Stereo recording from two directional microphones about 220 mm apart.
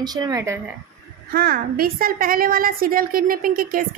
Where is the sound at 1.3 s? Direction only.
45° right (ahead or behind).